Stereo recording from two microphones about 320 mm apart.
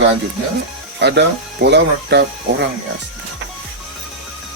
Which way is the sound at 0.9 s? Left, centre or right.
Right.